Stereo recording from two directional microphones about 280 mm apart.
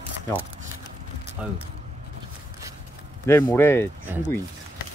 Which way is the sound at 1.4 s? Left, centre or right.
Centre.